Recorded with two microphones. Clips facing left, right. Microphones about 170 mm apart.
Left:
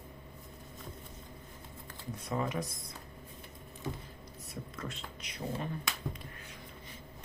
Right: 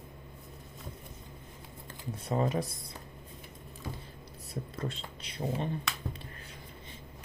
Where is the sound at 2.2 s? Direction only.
30° right (ahead or behind).